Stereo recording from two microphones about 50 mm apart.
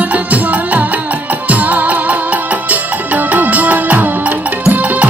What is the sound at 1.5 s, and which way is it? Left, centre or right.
Music, right.